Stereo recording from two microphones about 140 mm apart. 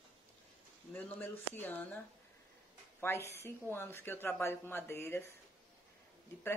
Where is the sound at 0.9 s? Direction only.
10° left (ahead or behind).